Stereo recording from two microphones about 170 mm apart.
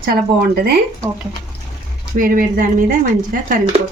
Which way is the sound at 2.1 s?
55° right (ahead or behind).